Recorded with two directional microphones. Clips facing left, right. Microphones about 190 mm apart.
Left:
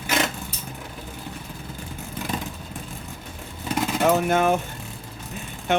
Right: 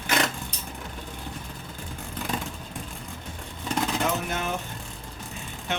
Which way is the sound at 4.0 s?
55° left (ahead or behind).